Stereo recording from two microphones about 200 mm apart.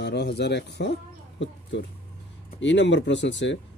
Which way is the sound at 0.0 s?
60° left (ahead or behind).